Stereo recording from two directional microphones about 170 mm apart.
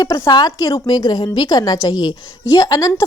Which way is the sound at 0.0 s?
25° left (ahead or behind).